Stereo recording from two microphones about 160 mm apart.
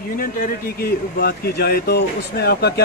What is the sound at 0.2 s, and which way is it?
Speech, 70° left (ahead or behind).